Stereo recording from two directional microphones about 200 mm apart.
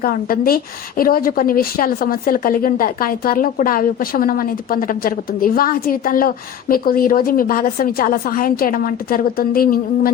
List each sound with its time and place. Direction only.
0.0 s a woman's voice: 45° left (ahead or behind)